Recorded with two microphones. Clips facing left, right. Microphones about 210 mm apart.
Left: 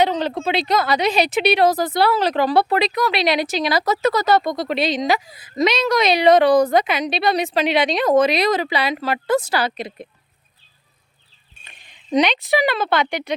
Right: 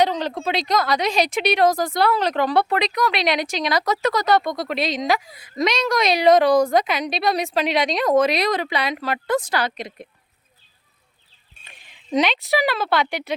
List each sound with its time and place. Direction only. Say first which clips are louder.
0.0 s a sound: left 1 dB; centre (ahead or behind)
0.4 s speech: left 1 dB; 5° left (ahead or behind)
9.6 s speech: left 2 dB; 30° left (ahead or behind)
12.1 s speech: left 2 dB; centre (ahead or behind)